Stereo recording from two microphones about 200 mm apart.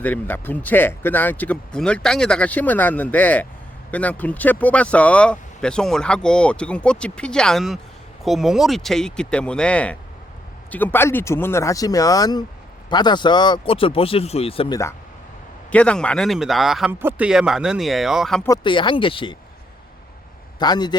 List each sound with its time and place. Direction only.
0.0 s speech: 10° left (ahead or behind); by 14.8 s 30° left (ahead or behind)
15.7 s speech: 5° left (ahead or behind)
18.4 s speech: 20° left (ahead or behind)
20.6 s speech: 20° left (ahead or behind)